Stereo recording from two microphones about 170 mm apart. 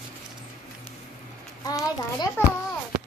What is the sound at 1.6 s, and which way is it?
Speech, 20° left (ahead or behind).